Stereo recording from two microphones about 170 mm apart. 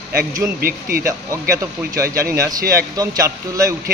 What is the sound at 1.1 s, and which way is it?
A man's voice, 15° right (ahead or behind).